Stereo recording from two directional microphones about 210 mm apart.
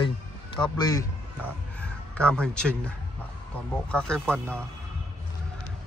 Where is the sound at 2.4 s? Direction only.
5° left (ahead or behind).